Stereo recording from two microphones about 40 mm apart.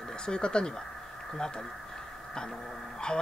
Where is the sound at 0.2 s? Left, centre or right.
Left.